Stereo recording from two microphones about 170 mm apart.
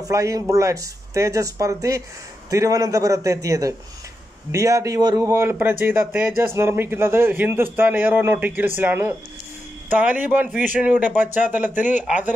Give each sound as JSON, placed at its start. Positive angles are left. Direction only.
{"t": 0.0, "sound": "speech", "side_deg": -20}